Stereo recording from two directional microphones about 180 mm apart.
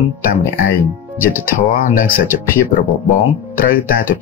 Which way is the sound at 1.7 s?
50° left (ahead or behind).